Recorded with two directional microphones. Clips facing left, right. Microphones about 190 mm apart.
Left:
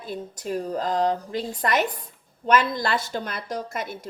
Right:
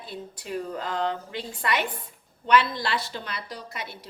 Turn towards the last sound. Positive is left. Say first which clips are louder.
# left 7 dB
turn(degrees=45)  # may be behind; listen again after turning